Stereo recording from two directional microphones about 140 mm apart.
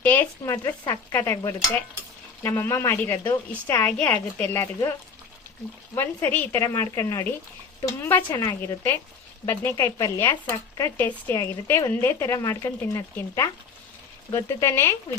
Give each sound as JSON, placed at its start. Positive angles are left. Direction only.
{"t": 0.0, "sound": "a woman's voice", "side_deg": 15}